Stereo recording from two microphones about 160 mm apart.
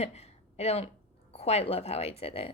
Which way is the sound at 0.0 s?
40° left (ahead or behind).